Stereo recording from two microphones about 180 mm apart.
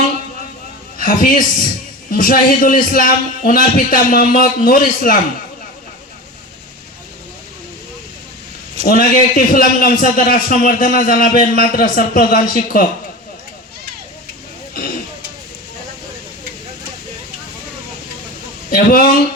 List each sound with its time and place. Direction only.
0.9 s a man's voice: 50° left (ahead or behind)
8.9 s a man's voice: 50° left (ahead or behind)
18.7 s a man's voice: 50° left (ahead or behind)